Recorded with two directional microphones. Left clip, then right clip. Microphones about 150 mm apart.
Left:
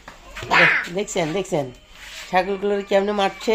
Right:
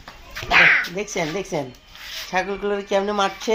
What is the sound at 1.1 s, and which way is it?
A woman's voice, 30° left (ahead or behind).